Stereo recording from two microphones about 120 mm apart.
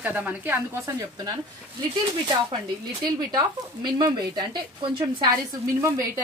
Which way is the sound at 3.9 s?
40° right (ahead or behind).